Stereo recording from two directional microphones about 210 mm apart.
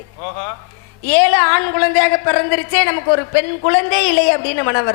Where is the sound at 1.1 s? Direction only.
15° left (ahead or behind).